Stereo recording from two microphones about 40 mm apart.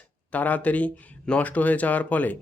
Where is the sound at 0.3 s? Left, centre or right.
Left.